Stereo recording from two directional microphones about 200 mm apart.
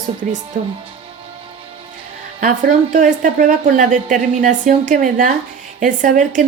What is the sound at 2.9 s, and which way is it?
Speech, 40° right (ahead or behind).